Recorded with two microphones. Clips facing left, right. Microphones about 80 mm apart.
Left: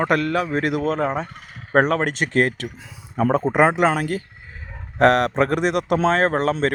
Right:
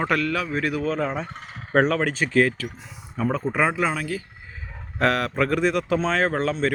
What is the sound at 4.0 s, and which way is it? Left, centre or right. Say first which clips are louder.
Speech: left 5 dB; left.